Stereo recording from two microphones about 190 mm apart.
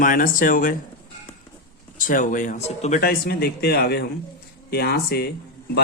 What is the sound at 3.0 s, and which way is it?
A man's voice, 55° left (ahead or behind).